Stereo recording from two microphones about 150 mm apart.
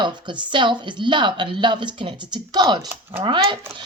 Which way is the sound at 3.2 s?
30° right (ahead or behind).